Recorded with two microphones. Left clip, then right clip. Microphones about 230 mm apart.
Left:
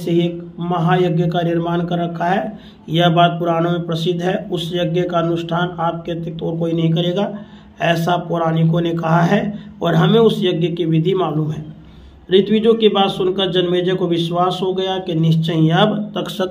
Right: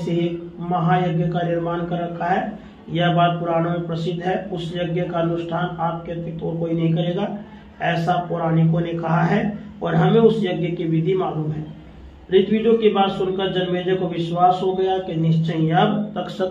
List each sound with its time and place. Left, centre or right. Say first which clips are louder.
0.7 s a man's voice: left 3 dB; left
12.3 s a man's voice: left 3 dB; left